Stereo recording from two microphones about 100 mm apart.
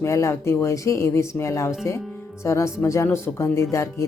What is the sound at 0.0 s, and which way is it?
Speech, 30° left (ahead or behind).